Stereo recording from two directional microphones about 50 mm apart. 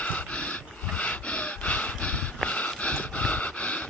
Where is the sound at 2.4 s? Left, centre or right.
Left.